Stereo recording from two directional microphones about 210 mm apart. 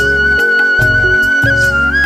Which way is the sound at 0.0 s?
Centre (ahead or behind).